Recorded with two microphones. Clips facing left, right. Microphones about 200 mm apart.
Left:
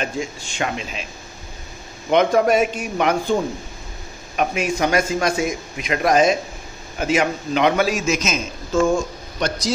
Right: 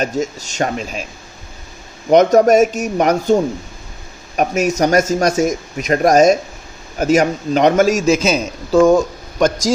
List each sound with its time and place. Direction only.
0.0 s a man's voice: 40° right (ahead or behind)
2.0 s a man's voice: 45° right (ahead or behind)
4.4 s a man's voice: 45° right (ahead or behind)
8.7 s speech: 65° right (ahead or behind)